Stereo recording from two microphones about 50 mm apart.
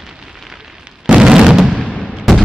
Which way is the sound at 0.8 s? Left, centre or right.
Centre.